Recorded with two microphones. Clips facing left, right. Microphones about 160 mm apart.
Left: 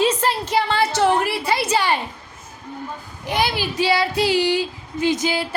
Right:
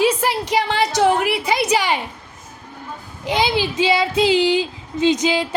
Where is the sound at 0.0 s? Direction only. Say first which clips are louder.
Right 1 dB; 10° right (ahead or behind).